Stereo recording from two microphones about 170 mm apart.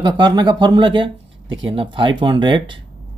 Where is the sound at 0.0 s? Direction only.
25° right (ahead or behind).